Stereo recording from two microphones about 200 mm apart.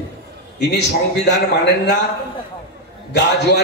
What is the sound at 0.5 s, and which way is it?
Speech, 60° left (ahead or behind).